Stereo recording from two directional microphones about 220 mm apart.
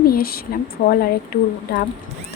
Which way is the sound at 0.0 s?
45° left (ahead or behind).